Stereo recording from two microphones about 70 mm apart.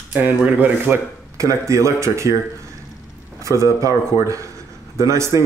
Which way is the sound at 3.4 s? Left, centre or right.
Right.